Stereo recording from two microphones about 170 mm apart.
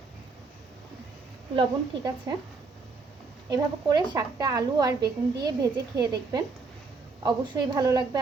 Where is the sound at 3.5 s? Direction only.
25° right (ahead or behind).